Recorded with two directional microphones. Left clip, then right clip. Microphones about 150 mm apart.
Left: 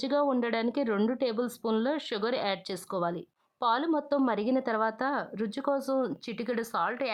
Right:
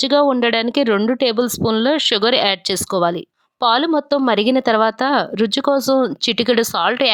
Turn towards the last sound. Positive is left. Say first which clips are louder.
# right 14 dB
turn(degrees=-40)  # may be behind; listen again after turning